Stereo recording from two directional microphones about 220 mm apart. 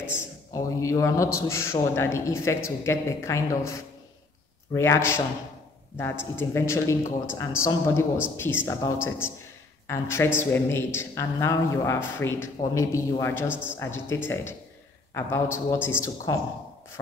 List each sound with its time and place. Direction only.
0.5 s a man's voice: 15° left (ahead or behind)
4.7 s a man's voice: 10° left (ahead or behind)
13.5 s speech: 5° right (ahead or behind)
13.7 s a man's voice: 10° left (ahead or behind)